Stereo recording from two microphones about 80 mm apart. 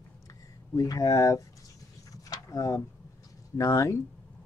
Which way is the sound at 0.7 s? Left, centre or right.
Left.